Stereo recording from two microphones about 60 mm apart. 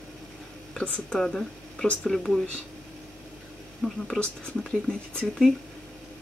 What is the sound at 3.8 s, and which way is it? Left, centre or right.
Speech, centre.